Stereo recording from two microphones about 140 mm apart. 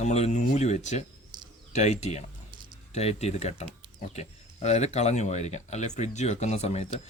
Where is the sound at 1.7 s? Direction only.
55° left (ahead or behind).